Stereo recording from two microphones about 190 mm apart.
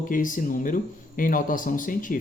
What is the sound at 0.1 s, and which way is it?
Speech, 45° left (ahead or behind).